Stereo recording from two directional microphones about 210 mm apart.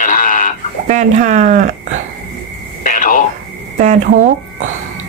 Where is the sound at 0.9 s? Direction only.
35° right (ahead or behind).